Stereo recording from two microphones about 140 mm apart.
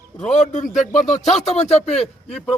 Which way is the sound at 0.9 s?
Centre (ahead or behind).